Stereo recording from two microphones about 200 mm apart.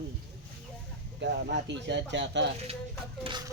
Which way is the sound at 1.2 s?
60° right (ahead or behind).